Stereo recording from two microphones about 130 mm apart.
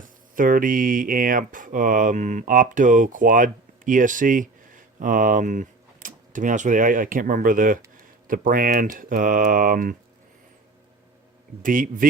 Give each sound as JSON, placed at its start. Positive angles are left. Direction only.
{"t": 0.0, "sound": "speech", "side_deg": -90}
{"t": 11.6, "sound": "speech", "side_deg": -90}